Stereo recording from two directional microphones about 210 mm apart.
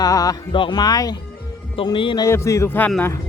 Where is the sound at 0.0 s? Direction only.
15° left (ahead or behind).